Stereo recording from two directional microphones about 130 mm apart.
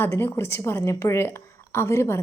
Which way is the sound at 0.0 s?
15° left (ahead or behind).